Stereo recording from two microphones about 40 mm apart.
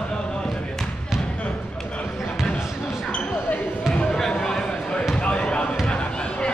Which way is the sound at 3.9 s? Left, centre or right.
Centre.